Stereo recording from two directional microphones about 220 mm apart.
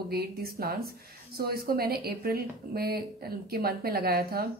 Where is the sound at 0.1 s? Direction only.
45° right (ahead or behind).